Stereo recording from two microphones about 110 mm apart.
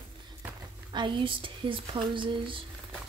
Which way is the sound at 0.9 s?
45° right (ahead or behind).